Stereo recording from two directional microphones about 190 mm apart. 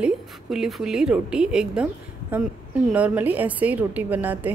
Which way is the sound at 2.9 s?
10° right (ahead or behind).